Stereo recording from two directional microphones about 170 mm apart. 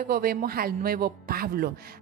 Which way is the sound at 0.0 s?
60° right (ahead or behind).